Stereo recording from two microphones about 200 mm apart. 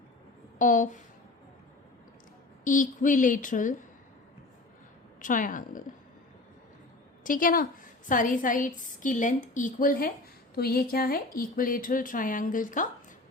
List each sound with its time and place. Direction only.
0.6 s a woman's voice: 40° left (ahead or behind)
2.6 s a woman's voice: 40° left (ahead or behind)
5.2 s a woman's voice: 40° left (ahead or behind)
7.3 s a woman's voice: 45° left (ahead or behind)